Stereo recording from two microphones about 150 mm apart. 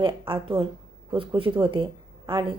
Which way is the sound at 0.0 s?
35° right (ahead or behind).